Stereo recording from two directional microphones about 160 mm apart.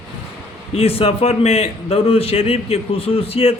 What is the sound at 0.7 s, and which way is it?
A man's voice, 35° left (ahead or behind).